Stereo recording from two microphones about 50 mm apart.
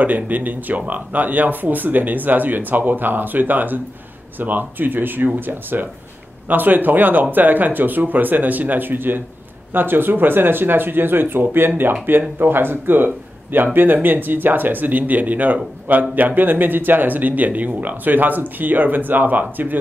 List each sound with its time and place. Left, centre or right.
0.0 s speech: right